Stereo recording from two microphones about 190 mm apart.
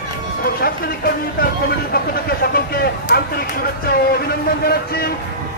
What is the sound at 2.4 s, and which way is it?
A man's voice, 55° left (ahead or behind).